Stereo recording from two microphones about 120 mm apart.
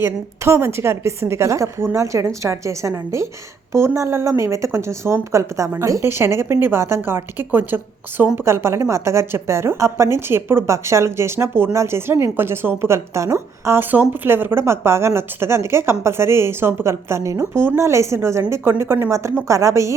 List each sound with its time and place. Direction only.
0.0 s a woman's voice: 20° right (ahead or behind)